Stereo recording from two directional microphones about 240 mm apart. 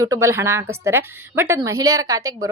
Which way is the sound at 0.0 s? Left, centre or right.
Centre.